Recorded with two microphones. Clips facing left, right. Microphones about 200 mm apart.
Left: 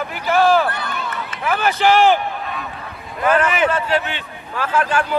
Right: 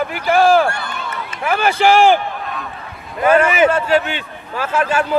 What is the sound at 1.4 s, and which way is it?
Speech, 10° right (ahead or behind).